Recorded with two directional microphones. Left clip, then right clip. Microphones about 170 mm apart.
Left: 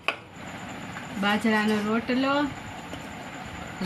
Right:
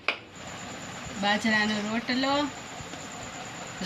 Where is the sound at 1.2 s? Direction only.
20° left (ahead or behind).